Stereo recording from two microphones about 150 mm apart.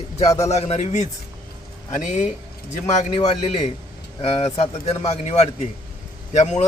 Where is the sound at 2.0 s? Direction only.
55° left (ahead or behind).